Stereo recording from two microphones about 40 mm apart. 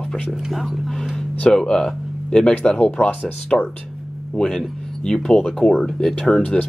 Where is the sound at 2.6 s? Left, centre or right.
Left.